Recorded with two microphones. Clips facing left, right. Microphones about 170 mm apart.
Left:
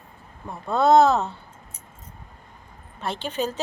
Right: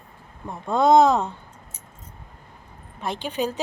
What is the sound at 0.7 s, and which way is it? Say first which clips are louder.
Speech: right 1 dB; 15° right (ahead or behind).